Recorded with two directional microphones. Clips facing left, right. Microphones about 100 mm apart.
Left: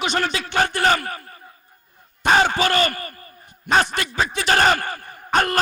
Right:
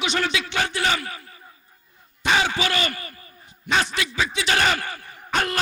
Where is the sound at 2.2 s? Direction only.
50° left (ahead or behind).